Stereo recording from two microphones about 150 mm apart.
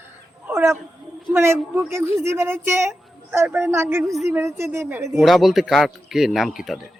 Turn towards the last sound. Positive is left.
turn(degrees=0)  # may be behind; listen again after turning